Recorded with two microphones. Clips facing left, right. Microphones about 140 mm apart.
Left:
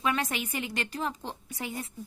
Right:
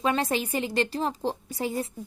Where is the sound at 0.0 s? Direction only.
30° right (ahead or behind).